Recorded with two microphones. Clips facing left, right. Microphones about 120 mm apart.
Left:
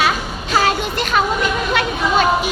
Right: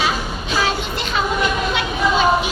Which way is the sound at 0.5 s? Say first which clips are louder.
Left 4 dB; 55° left (ahead or behind).